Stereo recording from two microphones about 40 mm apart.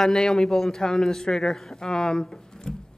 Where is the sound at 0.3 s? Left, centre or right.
Centre.